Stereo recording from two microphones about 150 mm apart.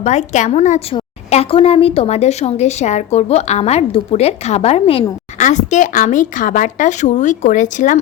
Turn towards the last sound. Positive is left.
turn(degrees=60)  # may be behind; listen again after turning